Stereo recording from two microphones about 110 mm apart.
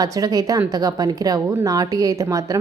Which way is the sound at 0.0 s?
35° right (ahead or behind).